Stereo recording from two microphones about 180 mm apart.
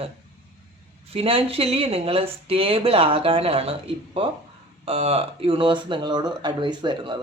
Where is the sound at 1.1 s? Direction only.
30° right (ahead or behind).